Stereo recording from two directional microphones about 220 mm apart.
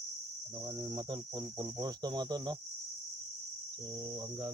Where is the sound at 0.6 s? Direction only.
15° right (ahead or behind).